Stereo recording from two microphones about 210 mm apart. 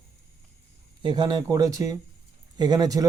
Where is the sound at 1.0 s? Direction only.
20° right (ahead or behind).